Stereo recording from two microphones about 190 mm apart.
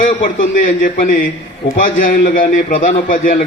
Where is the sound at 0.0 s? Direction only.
45° left (ahead or behind).